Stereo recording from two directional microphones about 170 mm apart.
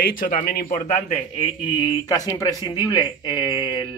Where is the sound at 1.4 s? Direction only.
25° left (ahead or behind).